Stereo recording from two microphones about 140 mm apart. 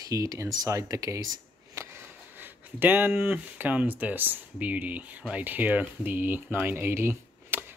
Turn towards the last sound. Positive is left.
turn(degrees=-15)  # may be behind; listen again after turning